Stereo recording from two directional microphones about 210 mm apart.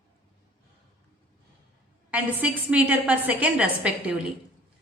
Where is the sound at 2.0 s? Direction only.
5° right (ahead or behind).